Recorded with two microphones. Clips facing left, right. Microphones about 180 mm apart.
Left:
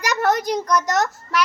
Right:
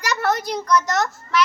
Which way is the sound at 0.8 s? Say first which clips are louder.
Left 2 dB; 40° left (ahead or behind).